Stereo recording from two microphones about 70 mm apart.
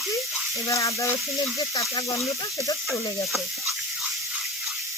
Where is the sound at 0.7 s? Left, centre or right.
Left.